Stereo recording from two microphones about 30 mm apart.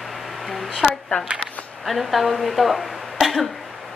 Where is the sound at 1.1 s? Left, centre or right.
Left.